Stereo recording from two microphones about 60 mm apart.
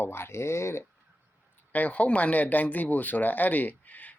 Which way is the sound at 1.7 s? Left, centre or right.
Left.